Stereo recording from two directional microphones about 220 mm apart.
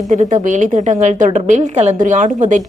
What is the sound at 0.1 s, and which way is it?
A woman's voice, 35° right (ahead or behind).